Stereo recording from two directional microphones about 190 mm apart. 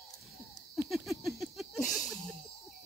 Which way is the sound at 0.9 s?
Centre (ahead or behind).